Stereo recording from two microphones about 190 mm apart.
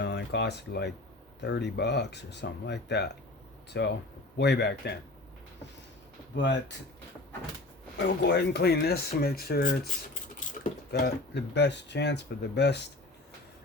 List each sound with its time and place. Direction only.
0.0 s speech: 65° left (ahead or behind)
6.3 s speech: 70° left (ahead or behind)
7.9 s speech: 65° left (ahead or behind)
10.9 s speech: 65° left (ahead or behind)